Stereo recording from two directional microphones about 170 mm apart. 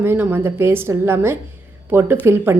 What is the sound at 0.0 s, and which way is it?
A woman's voice, 10° right (ahead or behind).